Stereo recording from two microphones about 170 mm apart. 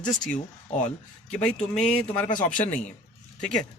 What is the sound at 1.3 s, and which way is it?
Speech, 5° left (ahead or behind).